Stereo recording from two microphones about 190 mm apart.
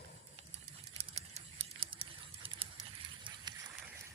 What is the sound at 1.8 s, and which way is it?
Patter, 30° right (ahead or behind).